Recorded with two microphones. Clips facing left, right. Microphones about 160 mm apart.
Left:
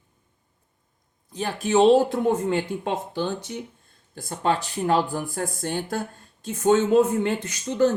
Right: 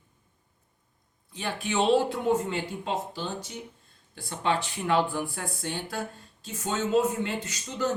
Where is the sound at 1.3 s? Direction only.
40° left (ahead or behind); by 3.6 s 60° left (ahead or behind).